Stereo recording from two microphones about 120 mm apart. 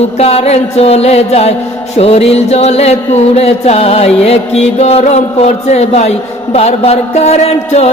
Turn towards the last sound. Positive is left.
turn(degrees=60)  # may be behind; listen again after turning